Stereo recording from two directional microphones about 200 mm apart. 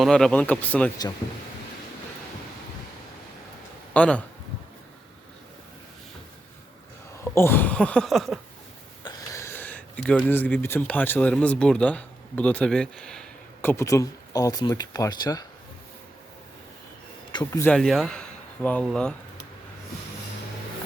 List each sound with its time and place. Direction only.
0.0 s speech: 5° left (ahead or behind)
3.9 s speech: 5° left (ahead or behind)
7.3 s speech: 10° left (ahead or behind)
9.0 s speech: 15° left (ahead or behind)
17.3 s speech: 15° left (ahead or behind)
17.7 s speech: centre (ahead or behind)